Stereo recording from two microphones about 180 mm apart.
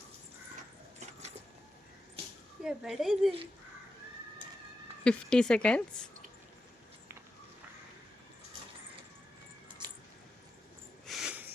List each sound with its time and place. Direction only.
2.6 s a woman's voice: 5° right (ahead or behind)
5.0 s a woman's voice: 5° left (ahead or behind)
9.8 s keys jangling: 25° right (ahead or behind)
11.0 s a sound: centre (ahead or behind)